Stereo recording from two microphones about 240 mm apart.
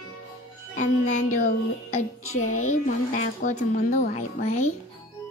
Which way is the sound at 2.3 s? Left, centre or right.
Left.